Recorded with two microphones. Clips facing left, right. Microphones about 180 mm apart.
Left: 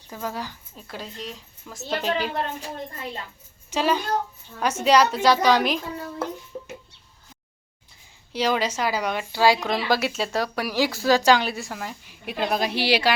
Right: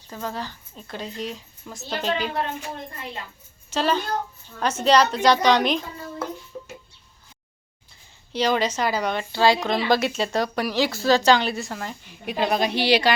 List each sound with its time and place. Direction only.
0.1 s speech: 10° left (ahead or behind)
3.7 s speech: 10° left (ahead or behind)
6.5 s music: 15° left (ahead or behind)
8.3 s a woman's voice: 5° left (ahead or behind)